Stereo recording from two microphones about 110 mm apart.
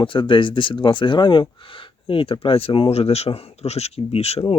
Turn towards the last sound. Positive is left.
turn(degrees=65)  # may be behind; listen again after turning